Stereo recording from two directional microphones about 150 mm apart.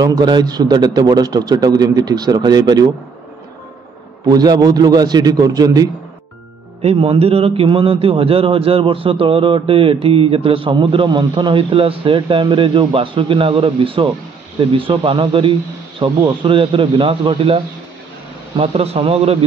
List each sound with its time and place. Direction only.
0.0 s a man's voice: 25° right (ahead or behind)
4.3 s a man's voice: 25° right (ahead or behind)
6.8 s a man's voice: 40° right (ahead or behind)
18.6 s a man's voice: 40° right (ahead or behind)